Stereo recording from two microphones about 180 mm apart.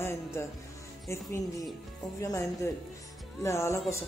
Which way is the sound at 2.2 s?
15° left (ahead or behind).